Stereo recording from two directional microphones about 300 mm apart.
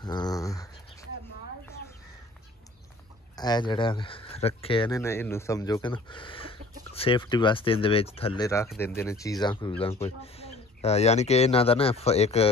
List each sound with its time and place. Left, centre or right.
0.0 s speech: centre
3.3 s speech: centre